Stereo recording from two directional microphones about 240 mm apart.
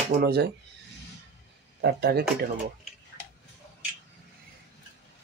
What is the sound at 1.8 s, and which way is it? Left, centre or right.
Speech, right.